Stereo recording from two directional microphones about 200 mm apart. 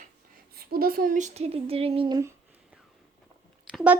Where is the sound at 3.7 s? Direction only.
5° right (ahead or behind).